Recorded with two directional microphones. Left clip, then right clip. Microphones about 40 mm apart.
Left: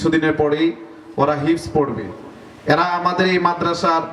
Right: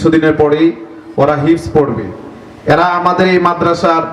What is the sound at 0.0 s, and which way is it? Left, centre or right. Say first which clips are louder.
A man's voice: right 7 dB; left.